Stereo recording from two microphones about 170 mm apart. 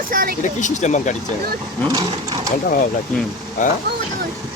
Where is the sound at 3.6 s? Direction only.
45° left (ahead or behind).